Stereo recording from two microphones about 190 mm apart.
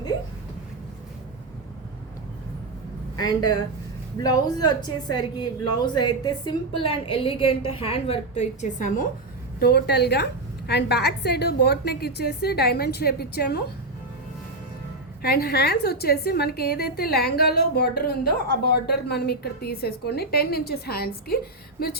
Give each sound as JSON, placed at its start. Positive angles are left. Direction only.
{"t": 3.2, "sound": "a woman's voice", "side_deg": 20}
{"t": 9.6, "sound": "a woman's voice", "side_deg": 55}
{"t": 15.2, "sound": "a woman's voice", "side_deg": 55}